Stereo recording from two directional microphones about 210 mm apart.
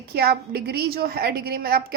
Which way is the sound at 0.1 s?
50° right (ahead or behind).